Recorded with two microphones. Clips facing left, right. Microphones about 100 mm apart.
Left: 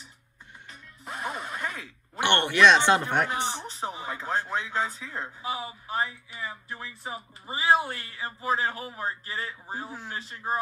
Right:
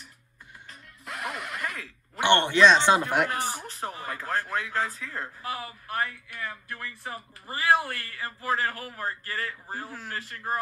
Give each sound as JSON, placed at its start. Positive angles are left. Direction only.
{"t": 0.7, "sound": "music", "side_deg": 25}
{"t": 2.2, "sound": "speech", "side_deg": -20}
{"t": 3.0, "sound": "speech", "side_deg": -5}
{"t": 3.6, "sound": "speech", "side_deg": 20}